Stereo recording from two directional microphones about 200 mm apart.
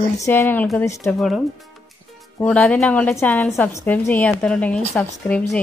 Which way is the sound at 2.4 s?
5° left (ahead or behind).